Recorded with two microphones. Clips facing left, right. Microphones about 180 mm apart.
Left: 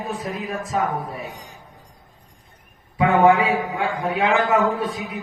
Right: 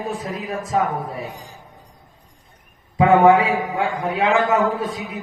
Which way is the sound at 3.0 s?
25° right (ahead or behind).